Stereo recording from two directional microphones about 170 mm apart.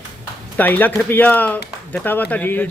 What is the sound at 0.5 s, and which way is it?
A man's voice, 10° left (ahead or behind).